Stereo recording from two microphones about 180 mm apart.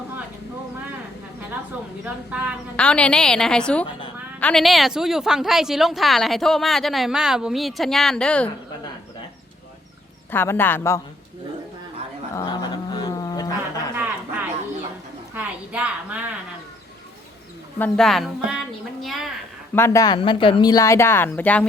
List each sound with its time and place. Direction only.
2.0 s speech: 5° right (ahead or behind)
2.7 s speech: 5° left (ahead or behind)
10.3 s a woman's voice: 10° left (ahead or behind)
12.3 s a sound: 20° left (ahead or behind)
13.9 s a sound: 10° right (ahead or behind)
17.7 s speech: 5° left (ahead or behind)
19.7 s a woman's voice: 15° left (ahead or behind)
20.1 s a woman's voice: 30° left (ahead or behind); by 21.7 s 10° left (ahead or behind)